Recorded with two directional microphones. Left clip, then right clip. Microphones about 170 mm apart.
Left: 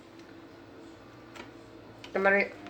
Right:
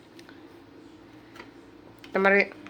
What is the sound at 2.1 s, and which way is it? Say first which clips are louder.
Speech: right 4 dB; 90° right.